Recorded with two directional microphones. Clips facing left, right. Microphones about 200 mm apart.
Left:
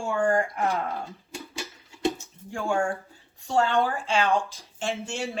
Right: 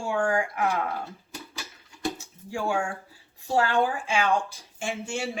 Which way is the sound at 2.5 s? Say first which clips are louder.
Left 2 dB; 5° right (ahead or behind).